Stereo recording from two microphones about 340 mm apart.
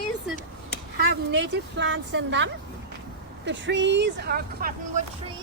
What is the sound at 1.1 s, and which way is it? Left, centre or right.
Speech, right.